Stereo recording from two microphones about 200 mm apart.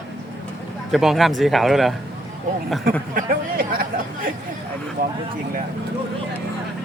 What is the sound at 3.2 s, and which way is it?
Speech, 45° right (ahead or behind).